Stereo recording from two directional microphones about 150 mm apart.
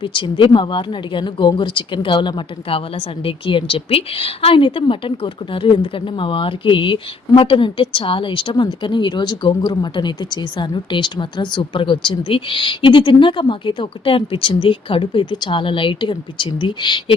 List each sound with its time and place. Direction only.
0.0 s speech: 35° left (ahead or behind)